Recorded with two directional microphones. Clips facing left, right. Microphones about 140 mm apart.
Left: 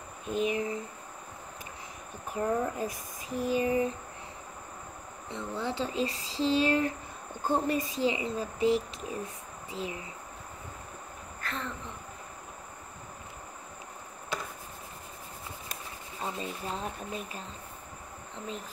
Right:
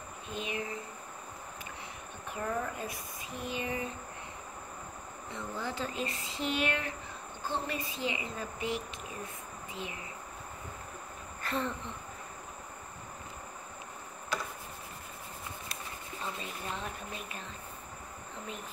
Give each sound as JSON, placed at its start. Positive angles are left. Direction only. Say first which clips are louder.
{"t": 0.3, "sound": "speech", "louder": "left 8 dB", "side_deg": 40}
{"t": 2.3, "sound": "speech", "louder": "left 6 dB", "side_deg": 35}
{"t": 5.3, "sound": "speech", "louder": "left 4 dB", "side_deg": 25}
{"t": 11.4, "sound": "speech", "louder": "right 4 dB", "side_deg": 0}
{"t": 15.7, "sound": "a sound", "louder": "even", "side_deg": 40}